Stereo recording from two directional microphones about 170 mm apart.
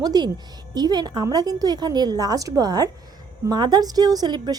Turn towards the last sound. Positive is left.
turn(degrees=-25)  # may be behind; listen again after turning